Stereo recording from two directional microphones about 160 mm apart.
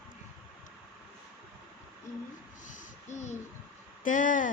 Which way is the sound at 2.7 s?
45° left (ahead or behind).